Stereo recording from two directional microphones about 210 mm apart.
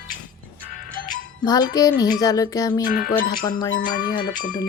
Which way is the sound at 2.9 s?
45° left (ahead or behind).